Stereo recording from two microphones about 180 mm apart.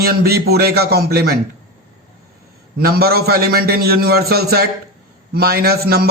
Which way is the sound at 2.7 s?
60° right (ahead or behind).